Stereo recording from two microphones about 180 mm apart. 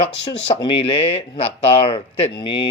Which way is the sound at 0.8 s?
30° left (ahead or behind).